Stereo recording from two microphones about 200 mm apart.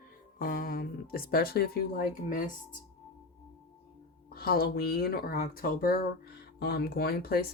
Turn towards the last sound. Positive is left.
turn(degrees=50)  # may be behind; listen again after turning